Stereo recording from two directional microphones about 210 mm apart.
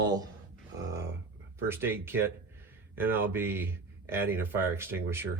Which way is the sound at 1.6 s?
10° right (ahead or behind).